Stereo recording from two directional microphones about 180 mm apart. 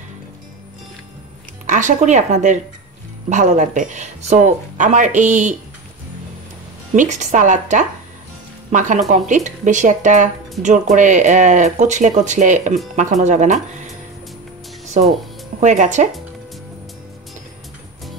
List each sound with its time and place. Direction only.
1.7 s speech: 45° right (ahead or behind)
7.0 s speech: 45° right (ahead or behind)
15.0 s speech: 45° right (ahead or behind)